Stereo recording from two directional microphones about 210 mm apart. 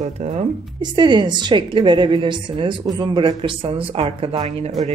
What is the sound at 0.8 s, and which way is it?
A woman's voice, 20° right (ahead or behind).